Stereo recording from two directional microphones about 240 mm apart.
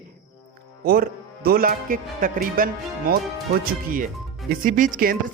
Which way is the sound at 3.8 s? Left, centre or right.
Right.